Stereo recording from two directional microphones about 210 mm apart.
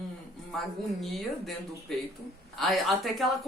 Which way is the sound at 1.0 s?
Centre (ahead or behind).